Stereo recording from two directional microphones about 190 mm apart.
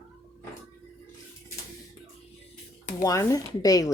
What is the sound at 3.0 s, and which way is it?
Speech, 15° left (ahead or behind).